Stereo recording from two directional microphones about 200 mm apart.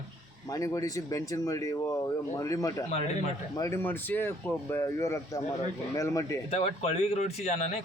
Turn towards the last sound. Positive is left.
turn(degrees=35)  # may be behind; listen again after turning